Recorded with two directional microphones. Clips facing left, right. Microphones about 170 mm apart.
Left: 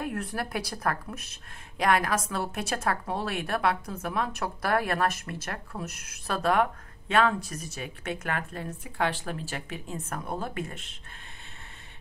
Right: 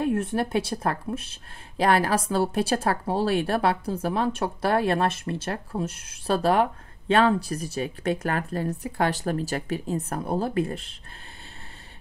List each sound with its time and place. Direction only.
0.0 s speech: 25° right (ahead or behind)